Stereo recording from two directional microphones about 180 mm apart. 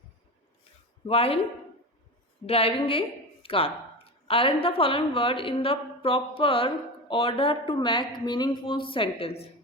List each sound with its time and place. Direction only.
1.0 s a woman's voice: 30° left (ahead or behind)
2.5 s a woman's voice: 30° left (ahead or behind)